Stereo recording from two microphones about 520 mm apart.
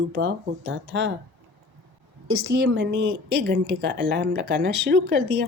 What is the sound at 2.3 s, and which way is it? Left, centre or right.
Speech, right.